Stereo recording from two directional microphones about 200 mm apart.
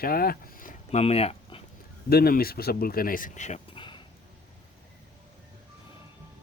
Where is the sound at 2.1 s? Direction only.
50° left (ahead or behind).